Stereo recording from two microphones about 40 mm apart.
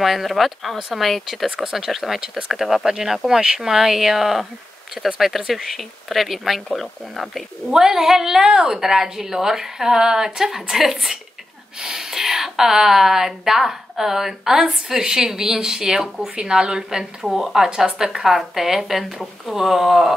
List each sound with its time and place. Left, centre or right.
0.0 s speech: centre
5.5 s speech: centre
7.7 s a woman's voice: centre
17.2 s speech: centre
17.6 s a woman's voice: right
17.9 s speech: centre